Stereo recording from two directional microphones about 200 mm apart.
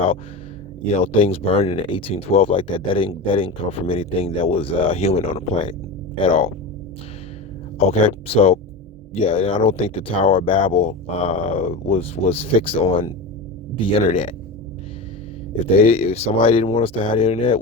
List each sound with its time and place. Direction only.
0.9 s speech: 30° left (ahead or behind)
7.8 s speech: 30° left (ahead or behind)
15.8 s speech: 30° left (ahead or behind)